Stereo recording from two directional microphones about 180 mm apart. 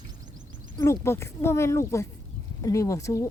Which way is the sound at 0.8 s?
15° left (ahead or behind).